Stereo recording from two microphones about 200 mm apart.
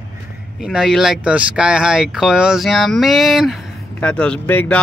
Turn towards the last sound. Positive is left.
turn(degrees=5)  # may be behind; listen again after turning